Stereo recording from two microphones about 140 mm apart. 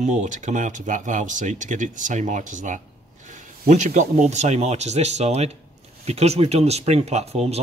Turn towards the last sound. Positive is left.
turn(degrees=-50)  # may be behind; listen again after turning